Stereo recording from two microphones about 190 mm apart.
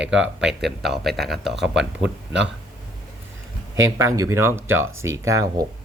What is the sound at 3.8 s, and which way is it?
Speech, 15° right (ahead or behind).